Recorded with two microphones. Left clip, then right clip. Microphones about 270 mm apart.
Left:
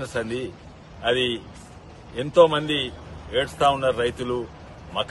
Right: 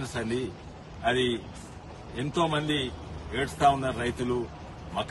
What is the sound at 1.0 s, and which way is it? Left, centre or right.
A man's voice, left.